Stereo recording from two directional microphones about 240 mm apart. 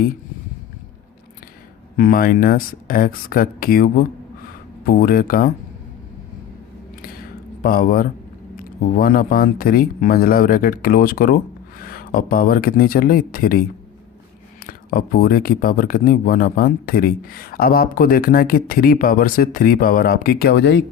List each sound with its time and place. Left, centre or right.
2.0 s speech: left
7.6 s speech: left
14.7 s speech: left